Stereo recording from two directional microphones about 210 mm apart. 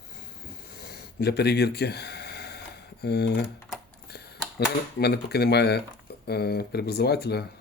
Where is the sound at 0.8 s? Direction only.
50° left (ahead or behind).